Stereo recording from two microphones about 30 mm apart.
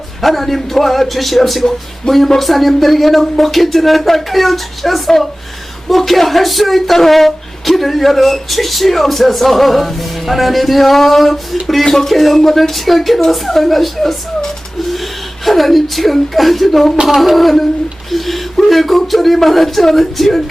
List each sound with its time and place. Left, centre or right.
0.2 s speech: centre
2.0 s speech: left
2.4 s a woman's voice: centre
18.7 s speech: centre